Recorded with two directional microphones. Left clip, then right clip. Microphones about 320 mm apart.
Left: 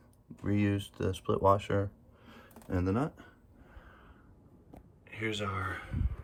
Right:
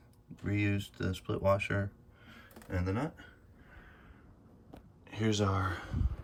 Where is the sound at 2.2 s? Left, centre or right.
Centre.